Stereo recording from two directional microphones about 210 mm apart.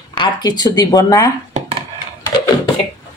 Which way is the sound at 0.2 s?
20° left (ahead or behind).